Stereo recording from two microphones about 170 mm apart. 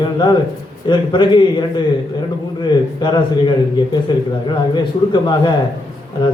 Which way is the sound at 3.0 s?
25° left (ahead or behind).